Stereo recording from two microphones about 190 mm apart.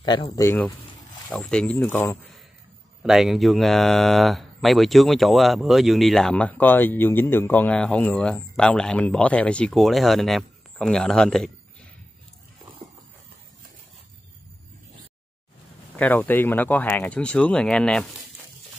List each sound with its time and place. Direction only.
0.0 s speech: 25° left (ahead or behind)
3.0 s speech: centre (ahead or behind)
16.0 s speech: 10° left (ahead or behind)